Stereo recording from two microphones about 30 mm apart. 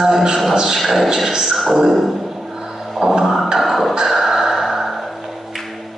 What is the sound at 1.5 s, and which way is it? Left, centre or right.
Speech, centre.